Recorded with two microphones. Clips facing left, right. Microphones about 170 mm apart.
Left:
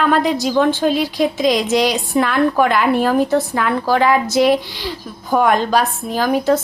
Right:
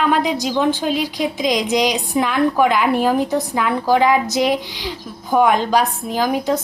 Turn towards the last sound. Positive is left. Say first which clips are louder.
# left 3 dB
turn(degrees=-15)  # may be behind; listen again after turning